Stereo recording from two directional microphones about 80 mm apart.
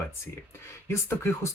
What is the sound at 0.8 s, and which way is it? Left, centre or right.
Speech, left.